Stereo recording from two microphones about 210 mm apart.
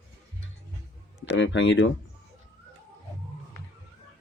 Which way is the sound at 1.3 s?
60° left (ahead or behind).